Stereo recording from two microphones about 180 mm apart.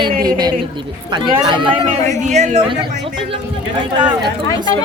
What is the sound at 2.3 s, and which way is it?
Speech, 40° right (ahead or behind).